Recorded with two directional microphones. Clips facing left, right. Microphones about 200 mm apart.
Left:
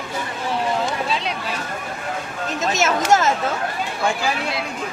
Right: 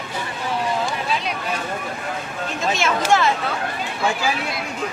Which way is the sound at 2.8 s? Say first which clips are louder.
Left 2 dB; 40° left (ahead or behind).